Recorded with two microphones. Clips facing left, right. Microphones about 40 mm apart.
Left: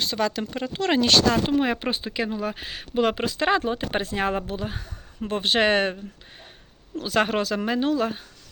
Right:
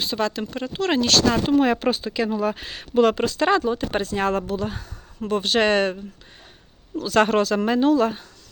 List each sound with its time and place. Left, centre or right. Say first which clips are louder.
0.0 s speech: right 1 dB; centre
7.1 s speech: right 4 dB; centre